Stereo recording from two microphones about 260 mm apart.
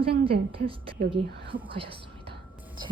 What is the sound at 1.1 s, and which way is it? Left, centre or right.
Speech, centre.